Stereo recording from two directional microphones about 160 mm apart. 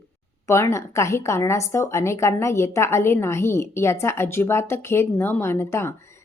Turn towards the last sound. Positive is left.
turn(degrees=15)  # may be behind; listen again after turning